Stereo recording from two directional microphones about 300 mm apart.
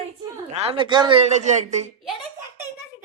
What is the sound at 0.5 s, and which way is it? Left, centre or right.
A woman's voice, centre.